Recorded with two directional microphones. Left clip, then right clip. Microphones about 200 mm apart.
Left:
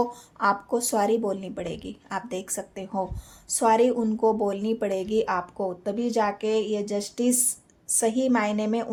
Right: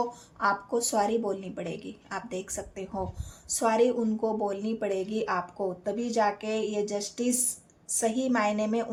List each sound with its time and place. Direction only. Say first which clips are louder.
0.0 s a woman's voice: left 4 dB; 40° left (ahead or behind)